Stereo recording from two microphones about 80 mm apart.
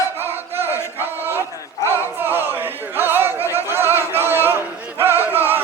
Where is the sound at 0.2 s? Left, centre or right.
Right.